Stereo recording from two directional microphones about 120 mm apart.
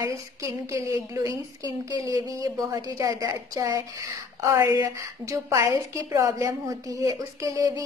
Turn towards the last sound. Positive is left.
turn(degrees=-30)  # may be behind; listen again after turning